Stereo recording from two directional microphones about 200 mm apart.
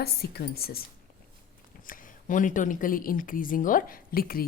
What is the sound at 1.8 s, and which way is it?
A woman's voice, 40° left (ahead or behind).